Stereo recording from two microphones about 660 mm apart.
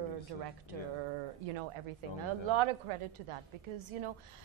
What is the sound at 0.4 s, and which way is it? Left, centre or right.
Speech, right.